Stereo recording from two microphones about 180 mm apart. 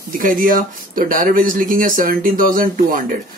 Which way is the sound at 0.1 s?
50° right (ahead or behind).